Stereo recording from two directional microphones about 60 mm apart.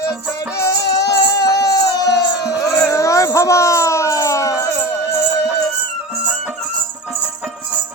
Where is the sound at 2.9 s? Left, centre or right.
Left.